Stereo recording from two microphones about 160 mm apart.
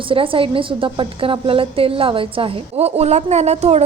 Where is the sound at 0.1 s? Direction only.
35° right (ahead or behind).